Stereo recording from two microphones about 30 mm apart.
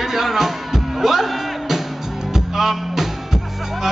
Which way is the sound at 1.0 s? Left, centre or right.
Centre.